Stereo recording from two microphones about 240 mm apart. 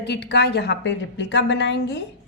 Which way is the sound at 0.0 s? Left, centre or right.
Left.